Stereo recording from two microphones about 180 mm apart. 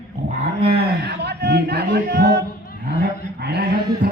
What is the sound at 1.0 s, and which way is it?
A man's voice, 65° right (ahead or behind).